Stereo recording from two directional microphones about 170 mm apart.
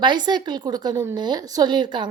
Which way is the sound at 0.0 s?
25° right (ahead or behind).